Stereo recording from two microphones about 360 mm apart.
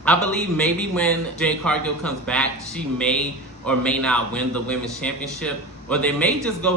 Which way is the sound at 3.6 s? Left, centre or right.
Centre.